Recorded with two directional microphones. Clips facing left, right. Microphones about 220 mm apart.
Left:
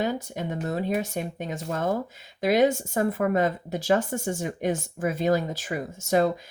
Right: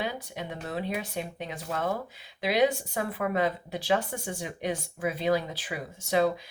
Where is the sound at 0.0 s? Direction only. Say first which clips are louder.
Left 6 dB; 45° left (ahead or behind).